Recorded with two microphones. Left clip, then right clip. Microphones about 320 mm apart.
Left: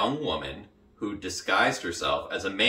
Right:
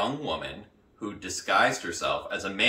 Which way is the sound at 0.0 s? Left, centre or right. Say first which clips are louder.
Left 2 dB; centre.